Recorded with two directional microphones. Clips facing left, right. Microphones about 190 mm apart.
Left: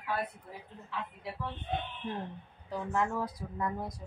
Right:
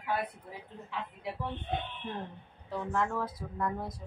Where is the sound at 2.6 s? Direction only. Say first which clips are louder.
Even; centre (ahead or behind).